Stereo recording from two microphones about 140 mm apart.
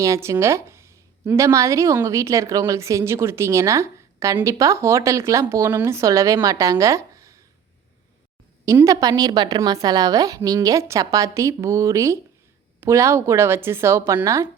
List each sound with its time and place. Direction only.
0.0 s speech: 20° right (ahead or behind)
8.6 s speech: 25° right (ahead or behind)